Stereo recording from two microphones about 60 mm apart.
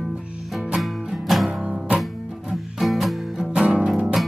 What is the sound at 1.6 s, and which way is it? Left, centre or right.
Music, centre.